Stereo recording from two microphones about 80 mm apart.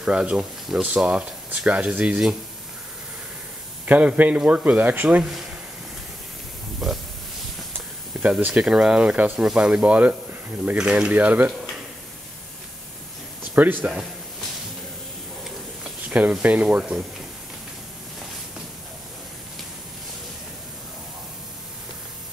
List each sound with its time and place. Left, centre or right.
0.0 s speech: centre
3.8 s speech: centre
5.2 s speech: centre
6.8 s speech: centre
8.1 s a sound: centre
8.5 s speech: centre
13.6 s speech: right
16.1 s speech: centre